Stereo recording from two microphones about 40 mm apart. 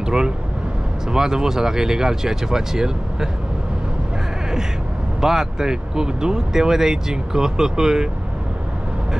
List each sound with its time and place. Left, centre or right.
0.0 s vehicle: centre
1.1 s speech: centre
5.2 s speech: centre